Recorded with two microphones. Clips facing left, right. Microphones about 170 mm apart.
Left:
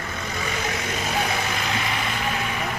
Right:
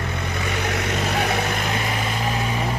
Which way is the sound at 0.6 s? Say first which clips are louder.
Right 3 dB; 65° right (ahead or behind).